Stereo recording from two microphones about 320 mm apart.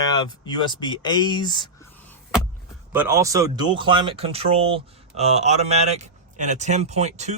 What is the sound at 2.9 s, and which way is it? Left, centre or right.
Speech, centre.